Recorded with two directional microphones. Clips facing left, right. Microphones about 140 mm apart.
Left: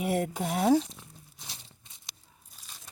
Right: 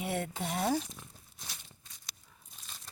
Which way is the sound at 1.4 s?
30° left (ahead or behind).